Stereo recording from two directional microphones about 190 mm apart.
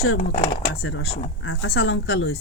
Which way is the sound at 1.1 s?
35° left (ahead or behind).